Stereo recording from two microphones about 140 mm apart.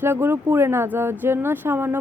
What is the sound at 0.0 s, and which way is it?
A woman's voice, 15° right (ahead or behind).